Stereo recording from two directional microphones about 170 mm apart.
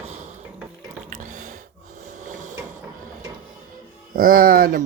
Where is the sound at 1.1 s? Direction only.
50° right (ahead or behind).